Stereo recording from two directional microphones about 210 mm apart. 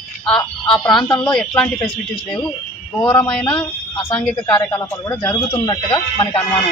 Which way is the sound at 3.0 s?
20° left (ahead or behind).